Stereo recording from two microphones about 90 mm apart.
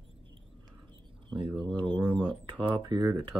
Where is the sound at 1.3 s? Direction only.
65° right (ahead or behind).